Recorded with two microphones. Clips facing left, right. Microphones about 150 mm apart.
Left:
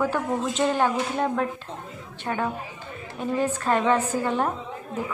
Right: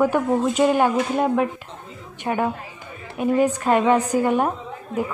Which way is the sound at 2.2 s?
15° right (ahead or behind).